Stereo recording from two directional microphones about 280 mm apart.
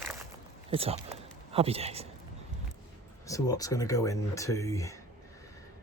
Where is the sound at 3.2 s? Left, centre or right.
Centre.